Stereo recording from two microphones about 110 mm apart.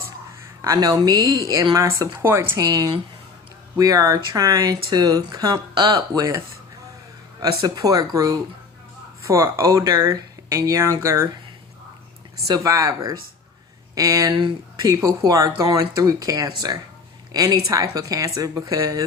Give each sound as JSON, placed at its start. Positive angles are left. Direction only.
{"t": 0.6, "sound": "speech", "side_deg": -35}
{"t": 2.6, "sound": "speech", "side_deg": -35}
{"t": 7.4, "sound": "speech", "side_deg": -35}
{"t": 12.5, "sound": "speech", "side_deg": -30}